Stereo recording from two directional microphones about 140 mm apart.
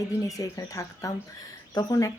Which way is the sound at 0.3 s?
25° left (ahead or behind).